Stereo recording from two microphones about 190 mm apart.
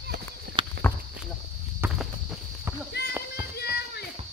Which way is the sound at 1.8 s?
10° right (ahead or behind).